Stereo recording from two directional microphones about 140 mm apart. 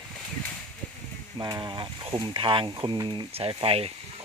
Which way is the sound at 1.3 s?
30° right (ahead or behind).